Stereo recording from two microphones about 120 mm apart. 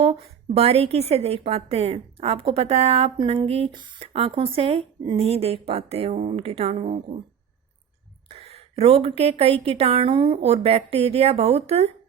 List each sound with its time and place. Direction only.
0.0 s a woman's voice: 55° right (ahead or behind)
8.3 s a sound: 55° right (ahead or behind)
9.4 s a woman's voice: 55° right (ahead or behind)